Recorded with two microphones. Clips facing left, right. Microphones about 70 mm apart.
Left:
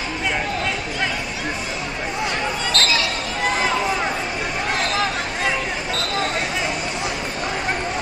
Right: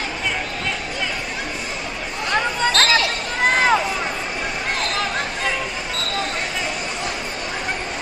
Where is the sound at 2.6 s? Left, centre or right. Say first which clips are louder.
Right 6 dB; right.